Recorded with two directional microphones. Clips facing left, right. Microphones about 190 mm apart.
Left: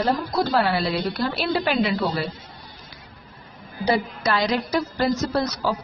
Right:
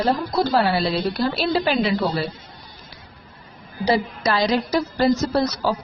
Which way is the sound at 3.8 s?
30° right (ahead or behind).